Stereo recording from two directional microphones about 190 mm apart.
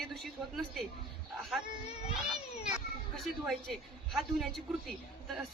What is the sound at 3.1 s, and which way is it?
Speech, centre (ahead or behind).